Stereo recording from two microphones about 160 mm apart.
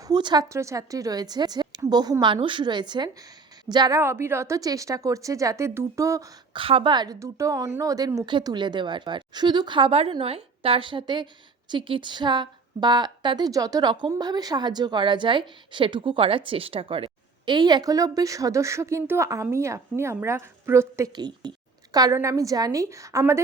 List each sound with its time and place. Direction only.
0.0 s a woman's voice: 25° right (ahead or behind)
6.6 s a woman's voice: 35° right (ahead or behind); by 23.4 s 20° right (ahead or behind)